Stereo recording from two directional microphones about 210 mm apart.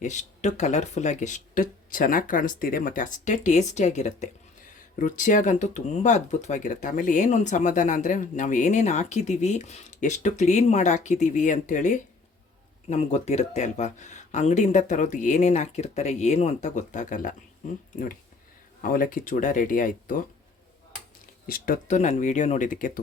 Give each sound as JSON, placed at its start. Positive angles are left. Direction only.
{"t": 0.0, "sound": "speech", "side_deg": 35}
{"t": 18.8, "sound": "speech", "side_deg": 40}
{"t": 21.4, "sound": "speech", "side_deg": 45}